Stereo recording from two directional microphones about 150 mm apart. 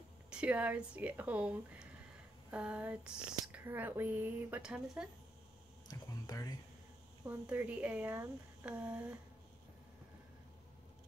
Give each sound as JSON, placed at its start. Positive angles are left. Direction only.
{"t": 0.3, "sound": "speech", "side_deg": -10}
{"t": 5.9, "sound": "speech", "side_deg": 25}
{"t": 7.2, "sound": "speech", "side_deg": -10}